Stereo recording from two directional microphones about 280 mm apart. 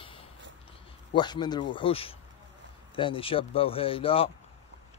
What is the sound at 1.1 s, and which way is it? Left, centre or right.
Speech, centre.